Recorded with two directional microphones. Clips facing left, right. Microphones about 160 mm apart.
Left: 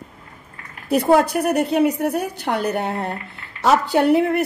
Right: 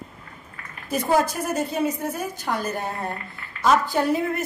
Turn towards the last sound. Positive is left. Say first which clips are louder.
# left 6 dB
turn(degrees=65)  # may be behind; listen again after turning